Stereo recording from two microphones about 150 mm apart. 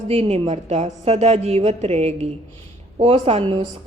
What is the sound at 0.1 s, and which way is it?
A woman's voice, 40° right (ahead or behind).